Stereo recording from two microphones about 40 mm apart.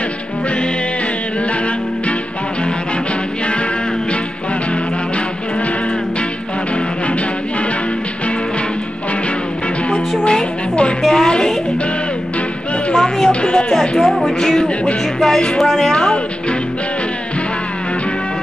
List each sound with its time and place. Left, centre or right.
10.2 s music: left
11.0 s a sound: centre
12.9 s music: centre
13.3 s music: left
14.0 s music: centre
14.4 s music: centre
15.9 s music: left